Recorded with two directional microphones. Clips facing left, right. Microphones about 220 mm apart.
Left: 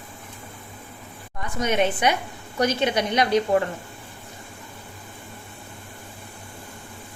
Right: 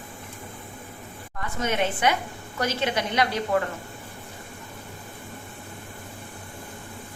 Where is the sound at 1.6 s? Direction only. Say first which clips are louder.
Left 3 dB; 15° left (ahead or behind).